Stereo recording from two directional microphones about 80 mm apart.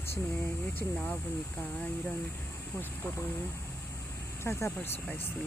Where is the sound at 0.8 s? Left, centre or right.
Left.